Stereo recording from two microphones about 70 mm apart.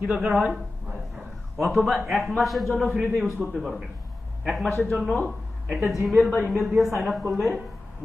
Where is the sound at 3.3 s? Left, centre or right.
Right.